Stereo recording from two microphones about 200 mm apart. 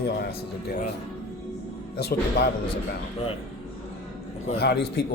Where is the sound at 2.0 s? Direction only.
50° left (ahead or behind).